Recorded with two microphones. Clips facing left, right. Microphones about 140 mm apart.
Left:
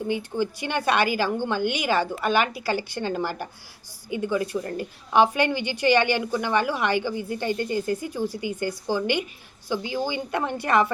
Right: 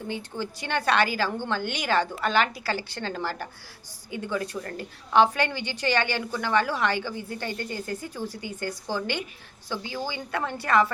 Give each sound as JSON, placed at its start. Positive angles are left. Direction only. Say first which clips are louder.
{"t": 0.1, "sound": "a woman's voice", "louder": "left 7 dB", "side_deg": 10}